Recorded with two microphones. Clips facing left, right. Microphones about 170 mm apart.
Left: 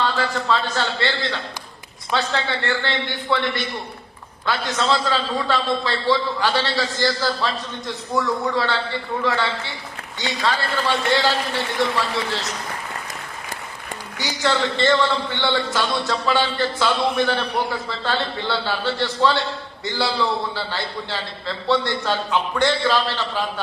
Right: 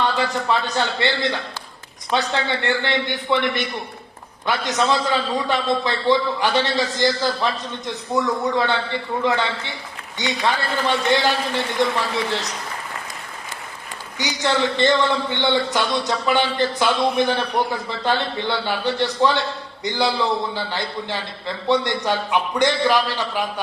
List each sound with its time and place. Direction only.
0.0 s a man's voice: 20° right (ahead or behind)
14.2 s a man's voice: 20° right (ahead or behind)